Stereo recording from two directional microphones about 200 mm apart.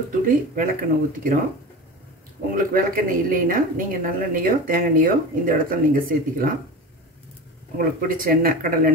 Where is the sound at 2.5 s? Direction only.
45° right (ahead or behind).